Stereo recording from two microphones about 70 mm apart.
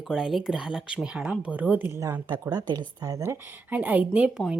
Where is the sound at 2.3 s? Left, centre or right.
Right.